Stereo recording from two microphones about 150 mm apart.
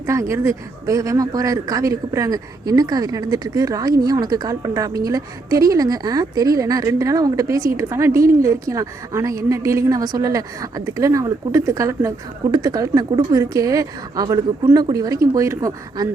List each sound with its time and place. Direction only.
0.0 s speech: 20° right (ahead or behind)